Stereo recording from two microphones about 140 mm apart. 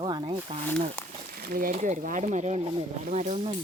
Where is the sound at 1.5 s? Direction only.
75° right (ahead or behind); by 3.4 s 55° right (ahead or behind).